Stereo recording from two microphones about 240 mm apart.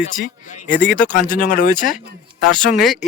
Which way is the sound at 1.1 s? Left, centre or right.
Left.